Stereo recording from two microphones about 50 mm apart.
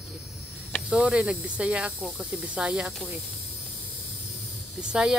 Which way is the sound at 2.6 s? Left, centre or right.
Centre.